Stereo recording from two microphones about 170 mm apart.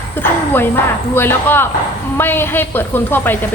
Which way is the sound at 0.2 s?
15° left (ahead or behind).